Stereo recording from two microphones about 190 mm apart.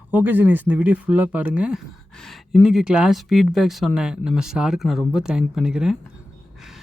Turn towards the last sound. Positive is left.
turn(degrees=-5)  # may be behind; listen again after turning